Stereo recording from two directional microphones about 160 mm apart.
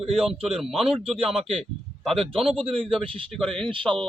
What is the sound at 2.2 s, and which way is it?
A man's voice, 35° right (ahead or behind).